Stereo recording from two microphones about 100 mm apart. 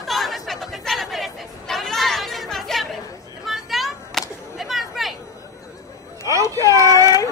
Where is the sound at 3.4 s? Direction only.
Centre (ahead or behind).